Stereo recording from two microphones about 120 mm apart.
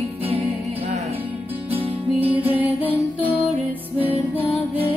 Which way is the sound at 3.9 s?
55° right (ahead or behind).